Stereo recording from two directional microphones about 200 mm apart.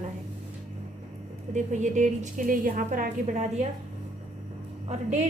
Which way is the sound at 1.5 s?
40° right (ahead or behind).